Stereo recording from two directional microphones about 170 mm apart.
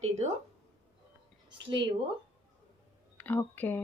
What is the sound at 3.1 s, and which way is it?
Speech, 10° left (ahead or behind).